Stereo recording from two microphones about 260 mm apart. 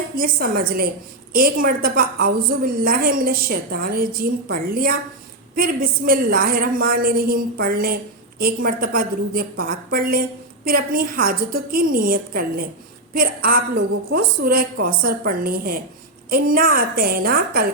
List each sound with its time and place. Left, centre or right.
0.2 s a woman's voice: right